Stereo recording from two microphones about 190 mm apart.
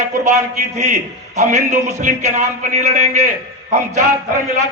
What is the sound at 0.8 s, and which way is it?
A man's voice, 40° right (ahead or behind).